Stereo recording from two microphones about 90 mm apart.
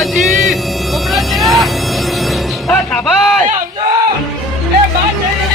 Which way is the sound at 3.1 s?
5° left (ahead or behind).